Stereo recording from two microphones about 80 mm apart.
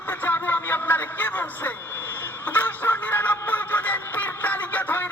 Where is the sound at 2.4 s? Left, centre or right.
Left.